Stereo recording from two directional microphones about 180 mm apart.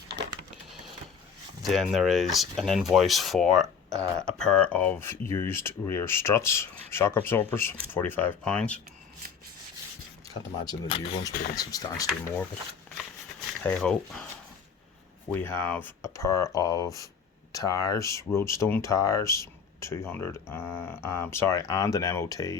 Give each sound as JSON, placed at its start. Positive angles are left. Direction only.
{"t": 1.6, "sound": "speech", "side_deg": 0}
{"t": 10.2, "sound": "speech", "side_deg": 25}
{"t": 13.7, "sound": "speech", "side_deg": 5}
{"t": 15.3, "sound": "speech", "side_deg": 10}